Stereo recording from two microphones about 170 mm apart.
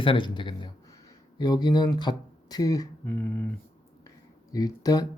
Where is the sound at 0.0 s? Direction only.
30° left (ahead or behind).